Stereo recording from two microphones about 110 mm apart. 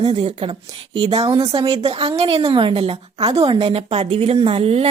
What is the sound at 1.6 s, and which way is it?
A woman's voice, 55° right (ahead or behind).